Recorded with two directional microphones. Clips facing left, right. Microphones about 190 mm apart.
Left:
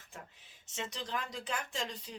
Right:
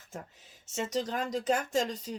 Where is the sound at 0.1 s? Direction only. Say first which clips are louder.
Right 8 dB; 40° right (ahead or behind).